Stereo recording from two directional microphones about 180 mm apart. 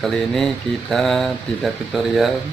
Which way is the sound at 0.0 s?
Centre (ahead or behind).